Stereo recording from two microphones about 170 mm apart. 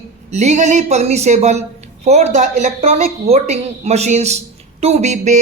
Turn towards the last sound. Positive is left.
turn(degrees=-40)  # may be behind; listen again after turning